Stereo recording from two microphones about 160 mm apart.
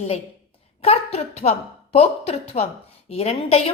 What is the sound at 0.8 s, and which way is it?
A woman's voice, 40° left (ahead or behind).